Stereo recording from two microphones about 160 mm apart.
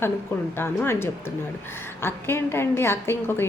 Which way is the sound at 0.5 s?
15° left (ahead or behind).